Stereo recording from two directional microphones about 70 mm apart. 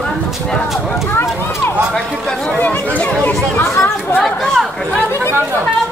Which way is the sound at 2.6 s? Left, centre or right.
Left.